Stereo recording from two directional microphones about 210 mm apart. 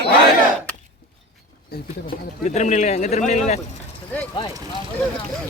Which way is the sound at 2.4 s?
35° left (ahead or behind).